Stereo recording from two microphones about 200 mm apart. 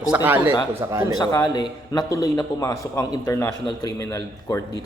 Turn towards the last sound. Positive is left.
turn(degrees=15)  # may be behind; listen again after turning